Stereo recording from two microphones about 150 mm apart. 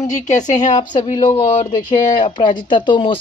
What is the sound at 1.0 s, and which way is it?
Speech, 35° left (ahead or behind).